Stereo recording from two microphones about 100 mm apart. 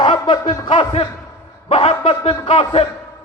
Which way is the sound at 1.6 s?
65° left (ahead or behind).